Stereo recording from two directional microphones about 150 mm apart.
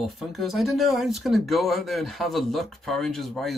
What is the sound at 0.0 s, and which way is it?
Speech, centre (ahead or behind).